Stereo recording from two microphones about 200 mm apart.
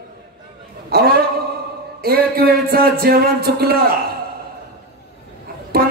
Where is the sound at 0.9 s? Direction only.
50° right (ahead or behind).